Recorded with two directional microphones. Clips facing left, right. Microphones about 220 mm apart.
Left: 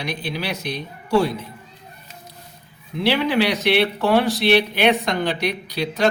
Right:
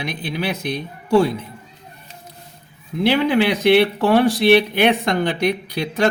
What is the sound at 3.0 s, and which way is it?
Speech, 50° right (ahead or behind).